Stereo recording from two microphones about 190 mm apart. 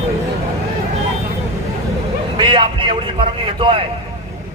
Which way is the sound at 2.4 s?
25° right (ahead or behind).